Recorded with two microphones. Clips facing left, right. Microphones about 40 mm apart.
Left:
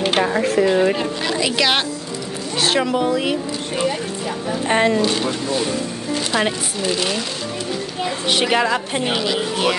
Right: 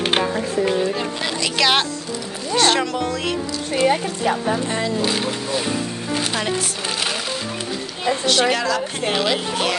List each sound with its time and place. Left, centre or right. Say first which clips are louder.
0.2 s music: left 4 dB; left
1.6 s speech: even; centre
3.8 s speech: right 6 dB; right
4.6 s speech: left 7 dB; left
8.3 s a woman's voice: left 2 dB; left